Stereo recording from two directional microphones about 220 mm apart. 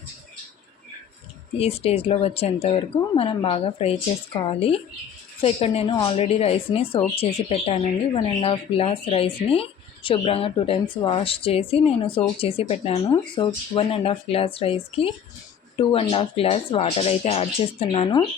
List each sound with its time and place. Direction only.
1.5 s speech: 25° left (ahead or behind)